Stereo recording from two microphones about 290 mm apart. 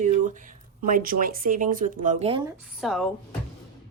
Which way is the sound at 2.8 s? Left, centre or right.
Centre.